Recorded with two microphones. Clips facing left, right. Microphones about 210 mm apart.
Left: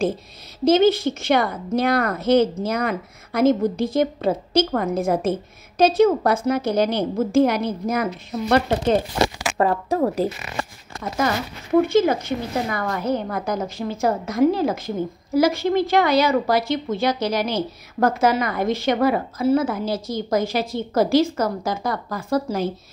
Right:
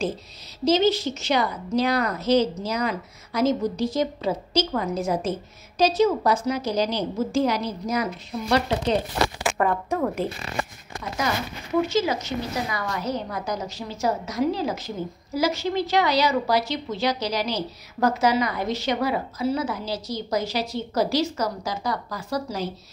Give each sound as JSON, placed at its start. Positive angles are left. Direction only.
{"t": 0.7, "sound": "a woman's voice", "side_deg": 55}
{"t": 9.2, "sound": "speech", "side_deg": 35}
{"t": 11.8, "sound": "a woman's voice", "side_deg": 55}